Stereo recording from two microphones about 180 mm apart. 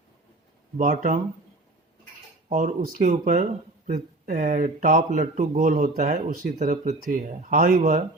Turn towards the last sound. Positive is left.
turn(degrees=-50)  # may be behind; listen again after turning